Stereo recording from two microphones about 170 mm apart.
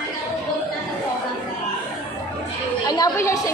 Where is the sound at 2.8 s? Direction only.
20° left (ahead or behind).